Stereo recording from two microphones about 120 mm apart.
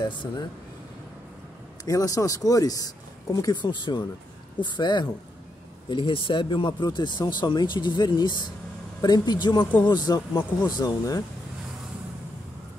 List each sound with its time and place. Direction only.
0.0 s speech: 40° left (ahead or behind)
1.9 s speech: 30° left (ahead or behind)